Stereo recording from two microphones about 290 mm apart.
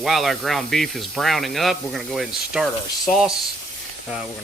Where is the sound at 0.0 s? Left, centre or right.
Centre.